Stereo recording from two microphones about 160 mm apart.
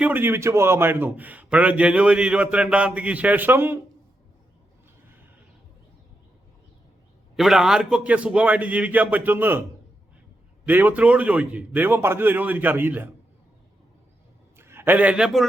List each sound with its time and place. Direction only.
0.0 s a man's voice: 10° right (ahead or behind)
7.3 s a man's voice: centre (ahead or behind)
10.7 s a man's voice: 10° right (ahead or behind)
14.6 s a man's voice: 15° right (ahead or behind)